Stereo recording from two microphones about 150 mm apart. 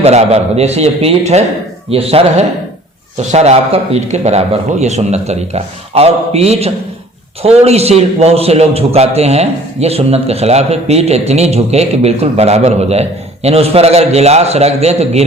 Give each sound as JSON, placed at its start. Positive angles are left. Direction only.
{"t": 0.0, "sound": "a man's voice", "side_deg": -45}